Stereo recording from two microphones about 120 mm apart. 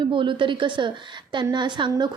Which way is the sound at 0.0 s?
45° right (ahead or behind).